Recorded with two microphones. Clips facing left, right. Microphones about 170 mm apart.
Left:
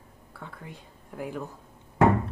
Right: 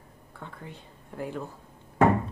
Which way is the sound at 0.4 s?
5° left (ahead or behind).